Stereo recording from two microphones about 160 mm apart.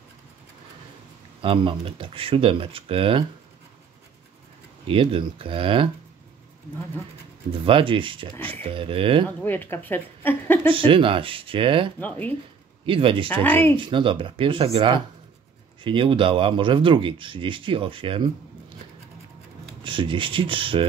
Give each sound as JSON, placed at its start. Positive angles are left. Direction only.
{"t": 1.4, "sound": "speech", "side_deg": -35}
{"t": 4.8, "sound": "speech", "side_deg": -35}
{"t": 7.6, "sound": "speech", "side_deg": -30}
{"t": 9.4, "sound": "speech", "side_deg": 10}
{"t": 10.7, "sound": "speech", "side_deg": -35}
{"t": 12.0, "sound": "speech", "side_deg": 10}
{"t": 12.8, "sound": "speech", "side_deg": -35}
{"t": 13.3, "sound": "speech", "side_deg": 10}
{"t": 13.7, "sound": "speech", "side_deg": -30}
{"t": 19.8, "sound": "speech", "side_deg": -30}